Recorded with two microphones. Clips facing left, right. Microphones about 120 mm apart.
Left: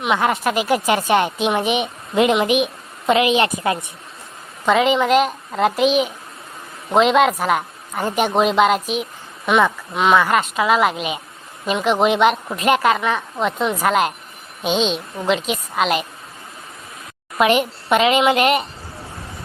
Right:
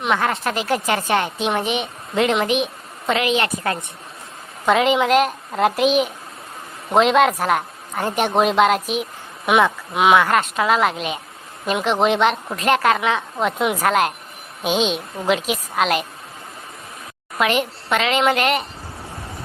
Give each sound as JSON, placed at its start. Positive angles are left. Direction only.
{"t": 0.0, "sound": "a woman's voice", "side_deg": 10}
{"t": 4.6, "sound": "a woman's voice", "side_deg": 0}
{"t": 17.3, "sound": "a woman's voice", "side_deg": 20}